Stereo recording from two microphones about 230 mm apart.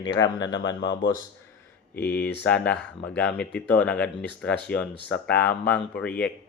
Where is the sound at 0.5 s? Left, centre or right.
Left.